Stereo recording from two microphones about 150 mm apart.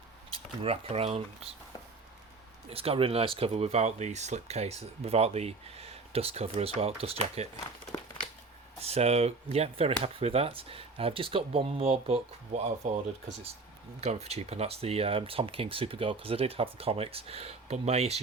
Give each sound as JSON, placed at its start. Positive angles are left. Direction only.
{"t": 0.3, "sound": "speech", "side_deg": -40}
{"t": 2.6, "sound": "speech", "side_deg": -40}
{"t": 8.8, "sound": "speech", "side_deg": -45}